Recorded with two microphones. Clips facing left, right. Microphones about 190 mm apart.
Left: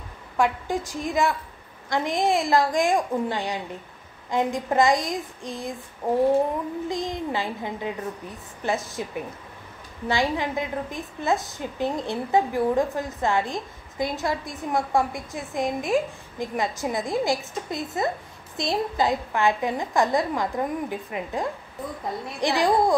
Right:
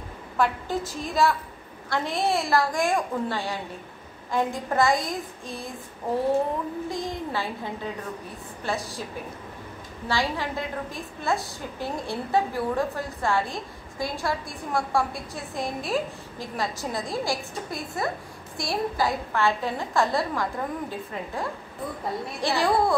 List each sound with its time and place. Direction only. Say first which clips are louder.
0.4 s a woman's voice: left 2 dB; 15° left (ahead or behind)
6.9 s a woman's voice: left 3 dB; 20° left (ahead or behind)
10.0 s a woman's voice: left 3 dB; 20° left (ahead or behind)